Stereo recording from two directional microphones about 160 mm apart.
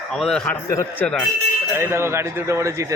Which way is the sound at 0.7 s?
20° left (ahead or behind).